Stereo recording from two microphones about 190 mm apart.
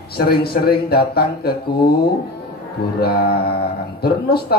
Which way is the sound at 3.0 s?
55° left (ahead or behind).